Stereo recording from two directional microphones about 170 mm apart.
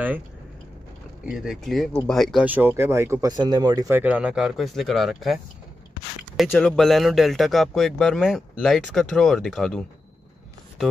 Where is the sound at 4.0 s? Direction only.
5° right (ahead or behind).